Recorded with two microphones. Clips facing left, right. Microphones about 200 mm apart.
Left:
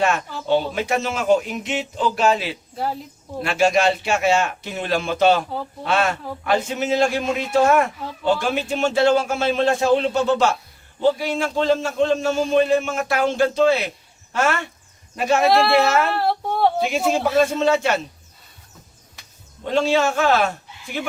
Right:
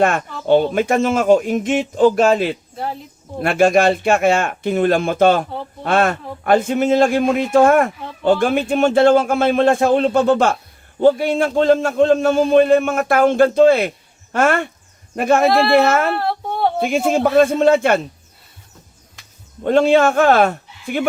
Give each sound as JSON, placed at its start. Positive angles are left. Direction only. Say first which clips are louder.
{"t": 0.0, "sound": "speech", "louder": "right 4 dB", "side_deg": -55}
{"t": 2.7, "sound": "speech", "louder": "even", "side_deg": 0}
{"t": 3.4, "sound": "a man's voice", "louder": "right 5 dB", "side_deg": -55}
{"t": 15.4, "sound": "speech", "louder": "right 2 dB", "side_deg": 0}
{"t": 15.7, "sound": "speech", "louder": "right 4 dB", "side_deg": -50}
{"t": 16.0, "sound": "speech", "louder": "right 1 dB", "side_deg": 0}
{"t": 16.8, "sound": "speech", "louder": "right 4 dB", "side_deg": -50}
{"t": 19.6, "sound": "a man's voice", "louder": "right 6 dB", "side_deg": -55}